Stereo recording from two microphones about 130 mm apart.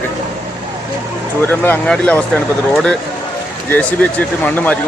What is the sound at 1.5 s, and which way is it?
Speech, 10° left (ahead or behind).